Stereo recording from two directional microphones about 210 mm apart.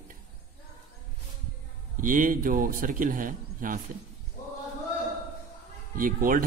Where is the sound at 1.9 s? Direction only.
40° right (ahead or behind).